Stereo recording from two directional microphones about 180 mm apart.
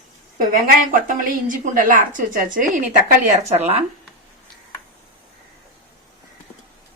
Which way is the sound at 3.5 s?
35° right (ahead or behind).